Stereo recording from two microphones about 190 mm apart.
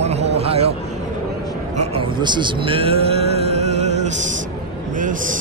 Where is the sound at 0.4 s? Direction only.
30° right (ahead or behind).